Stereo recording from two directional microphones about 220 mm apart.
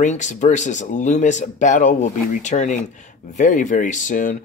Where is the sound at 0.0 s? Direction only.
30° left (ahead or behind).